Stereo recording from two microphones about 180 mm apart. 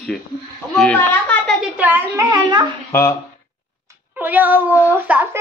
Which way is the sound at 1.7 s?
10° right (ahead or behind).